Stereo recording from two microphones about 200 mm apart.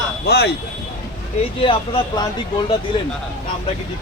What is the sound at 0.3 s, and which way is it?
Speech, 55° left (ahead or behind).